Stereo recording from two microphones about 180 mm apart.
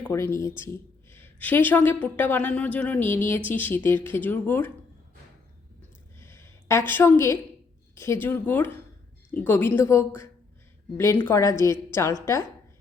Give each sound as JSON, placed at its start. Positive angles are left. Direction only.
{"t": 0.1, "sound": "a woman's voice", "side_deg": 15}
{"t": 6.1, "sound": "a sound", "side_deg": 15}
{"t": 7.9, "sound": "a woman's voice", "side_deg": 15}